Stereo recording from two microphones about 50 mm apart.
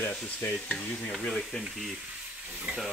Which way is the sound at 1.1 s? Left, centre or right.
Centre.